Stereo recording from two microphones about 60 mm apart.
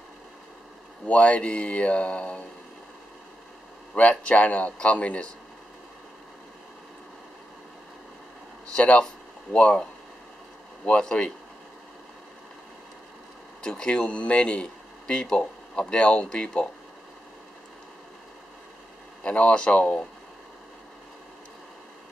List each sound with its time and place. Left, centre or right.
1.0 s speech: left
3.9 s speech: centre
8.7 s speech: centre
10.9 s speech: centre
13.6 s speech: centre
19.2 s speech: left